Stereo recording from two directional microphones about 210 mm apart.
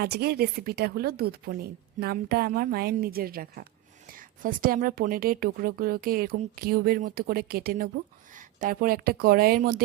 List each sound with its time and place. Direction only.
0.0 s a woman's voice: 50° right (ahead or behind)